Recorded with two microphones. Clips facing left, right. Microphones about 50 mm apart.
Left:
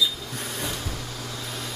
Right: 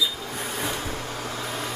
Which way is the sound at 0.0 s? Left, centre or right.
Centre.